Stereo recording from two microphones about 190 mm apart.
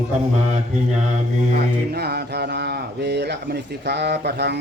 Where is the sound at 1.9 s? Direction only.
55° right (ahead or behind).